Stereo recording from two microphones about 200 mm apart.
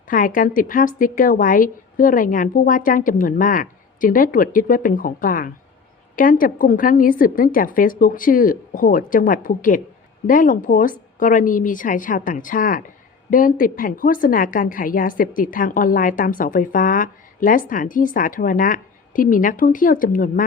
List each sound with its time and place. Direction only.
0.1 s a woman's voice: 40° left (ahead or behind)